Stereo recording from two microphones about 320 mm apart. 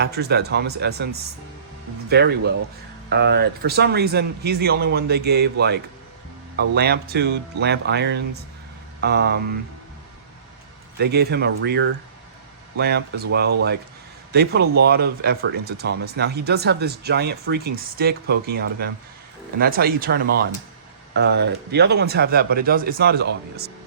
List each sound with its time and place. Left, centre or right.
0.0 s speech: right
10.9 s speech: right